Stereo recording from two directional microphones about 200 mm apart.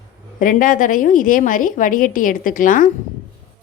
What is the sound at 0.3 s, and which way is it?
A woman's voice, 45° left (ahead or behind).